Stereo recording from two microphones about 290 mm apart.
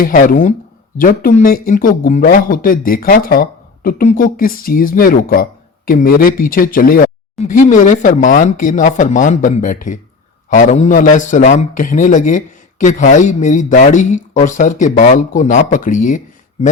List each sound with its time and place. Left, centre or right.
0.0 s speech: left